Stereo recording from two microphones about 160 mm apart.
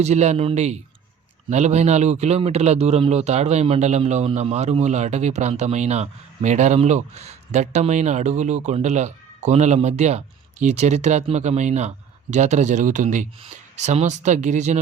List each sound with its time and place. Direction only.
0.0 s a man's voice: 45° right (ahead or behind)